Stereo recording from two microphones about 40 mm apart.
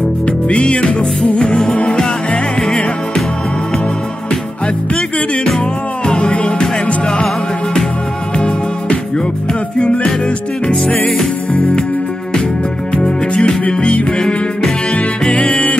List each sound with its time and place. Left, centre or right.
0.5 s music: left
6.0 s music: left
8.4 s music: left
12.9 s music: left
14.1 s music: centre
15.3 s music: left